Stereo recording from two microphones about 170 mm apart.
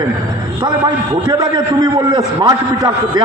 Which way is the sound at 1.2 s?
25° right (ahead or behind).